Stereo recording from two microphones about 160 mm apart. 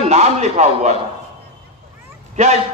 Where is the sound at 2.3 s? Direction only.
45° right (ahead or behind).